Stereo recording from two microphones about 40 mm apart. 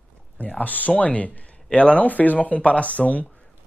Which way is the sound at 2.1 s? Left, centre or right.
Left.